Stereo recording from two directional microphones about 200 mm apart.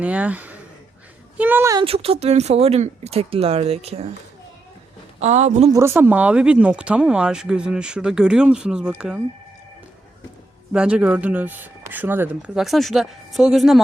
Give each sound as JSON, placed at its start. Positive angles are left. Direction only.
{"t": 0.0, "sound": "speech", "side_deg": -5}
{"t": 1.8, "sound": "speech", "side_deg": -30}
{"t": 5.2, "sound": "speech", "side_deg": -35}
{"t": 5.7, "sound": "speech", "side_deg": -10}
{"t": 10.7, "sound": "speech", "side_deg": -5}